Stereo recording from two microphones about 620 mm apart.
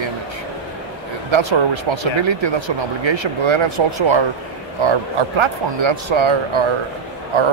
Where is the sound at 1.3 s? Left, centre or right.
Right.